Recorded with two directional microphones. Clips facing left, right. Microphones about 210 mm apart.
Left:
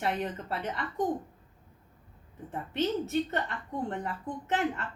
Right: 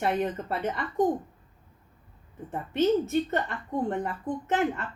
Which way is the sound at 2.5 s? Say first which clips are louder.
Right 6 dB; 45° right (ahead or behind).